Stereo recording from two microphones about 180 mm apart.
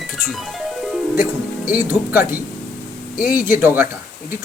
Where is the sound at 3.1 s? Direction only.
55° left (ahead or behind).